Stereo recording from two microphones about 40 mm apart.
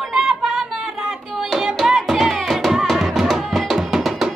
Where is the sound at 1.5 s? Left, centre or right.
Centre.